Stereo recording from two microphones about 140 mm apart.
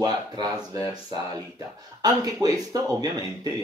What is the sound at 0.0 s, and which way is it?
Speech, 30° right (ahead or behind).